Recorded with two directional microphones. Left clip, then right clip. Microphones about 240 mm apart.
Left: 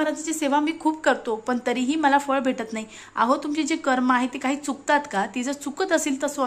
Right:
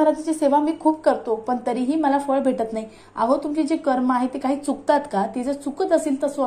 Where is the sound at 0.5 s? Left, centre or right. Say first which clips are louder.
Right 4 dB; left.